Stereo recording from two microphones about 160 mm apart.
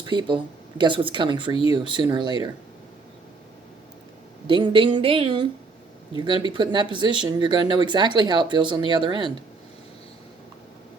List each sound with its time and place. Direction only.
0.1 s speech: 30° right (ahead or behind)
4.4 s speech: 30° right (ahead or behind)